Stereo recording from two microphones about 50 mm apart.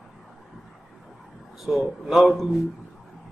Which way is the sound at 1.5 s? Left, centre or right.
Centre.